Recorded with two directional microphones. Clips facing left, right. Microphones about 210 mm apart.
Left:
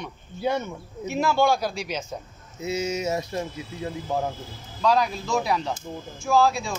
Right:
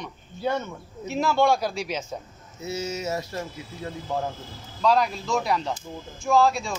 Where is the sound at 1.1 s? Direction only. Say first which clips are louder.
Even; centre (ahead or behind).